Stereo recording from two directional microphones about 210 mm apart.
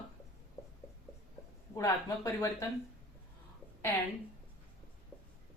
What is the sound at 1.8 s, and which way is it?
Speech, 15° left (ahead or behind).